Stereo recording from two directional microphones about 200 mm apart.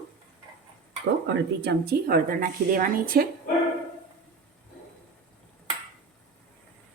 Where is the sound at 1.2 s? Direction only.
55° right (ahead or behind).